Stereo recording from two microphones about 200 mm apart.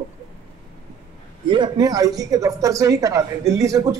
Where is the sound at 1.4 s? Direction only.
20° right (ahead or behind).